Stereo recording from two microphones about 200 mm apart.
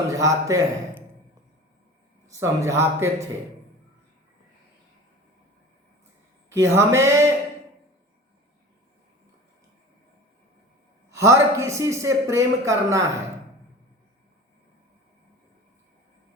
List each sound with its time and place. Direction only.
0.1 s speech: 15° right (ahead or behind)
2.2 s speech: 15° right (ahead or behind)
6.5 s speech: 15° right (ahead or behind)
11.1 s speech: 15° right (ahead or behind)